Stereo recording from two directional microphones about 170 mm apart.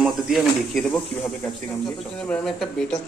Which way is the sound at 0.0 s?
Centre (ahead or behind).